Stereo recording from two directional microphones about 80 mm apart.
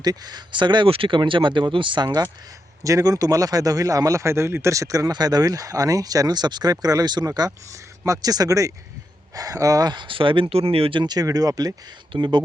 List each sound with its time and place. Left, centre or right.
0.0 s speech: right
2.8 s a man's voice: right
7.3 s a man's voice: right
10.9 s speech: right
12.1 s speech: right